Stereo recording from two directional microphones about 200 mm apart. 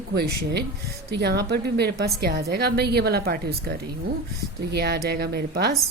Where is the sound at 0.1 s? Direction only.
55° right (ahead or behind).